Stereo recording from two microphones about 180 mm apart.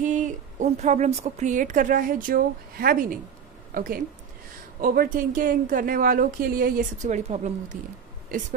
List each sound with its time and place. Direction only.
0.0 s a woman's voice: 45° right (ahead or behind)